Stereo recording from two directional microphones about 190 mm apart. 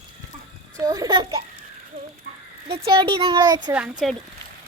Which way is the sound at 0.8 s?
20° right (ahead or behind).